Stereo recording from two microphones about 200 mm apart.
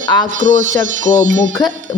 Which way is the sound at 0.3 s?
40° right (ahead or behind).